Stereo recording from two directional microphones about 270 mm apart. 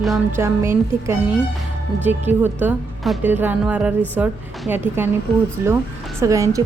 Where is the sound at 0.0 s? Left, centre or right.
Centre.